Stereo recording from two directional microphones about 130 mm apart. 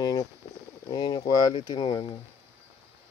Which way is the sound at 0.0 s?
30° left (ahead or behind).